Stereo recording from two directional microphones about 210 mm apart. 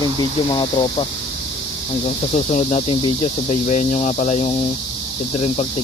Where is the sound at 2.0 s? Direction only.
35° left (ahead or behind).